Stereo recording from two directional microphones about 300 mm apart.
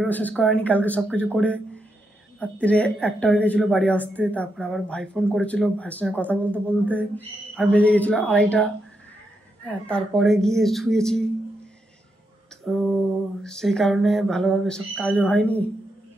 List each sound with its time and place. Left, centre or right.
0.0 s speech: centre
6.3 s a man's voice: centre
6.7 s speech: centre
9.7 s speech: centre
12.7 s speech: centre